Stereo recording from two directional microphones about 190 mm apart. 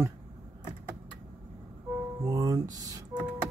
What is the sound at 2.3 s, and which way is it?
Speech, 20° right (ahead or behind).